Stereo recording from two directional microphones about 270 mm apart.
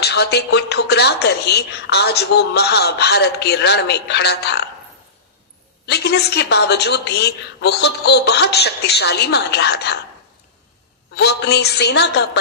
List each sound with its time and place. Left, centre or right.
0.0 s speech: left
5.8 s speech: left
11.1 s speech: left